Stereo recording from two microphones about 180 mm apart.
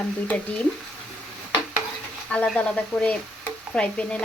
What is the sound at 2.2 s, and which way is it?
Speech, 5° left (ahead or behind).